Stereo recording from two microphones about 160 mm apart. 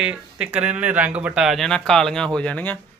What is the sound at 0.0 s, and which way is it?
A man's voice, 5° right (ahead or behind).